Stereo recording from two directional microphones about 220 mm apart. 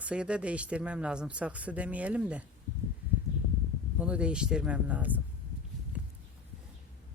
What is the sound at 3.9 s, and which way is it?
Speech, 5° right (ahead or behind).